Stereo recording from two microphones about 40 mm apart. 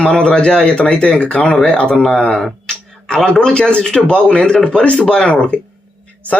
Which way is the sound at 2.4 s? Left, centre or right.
Centre.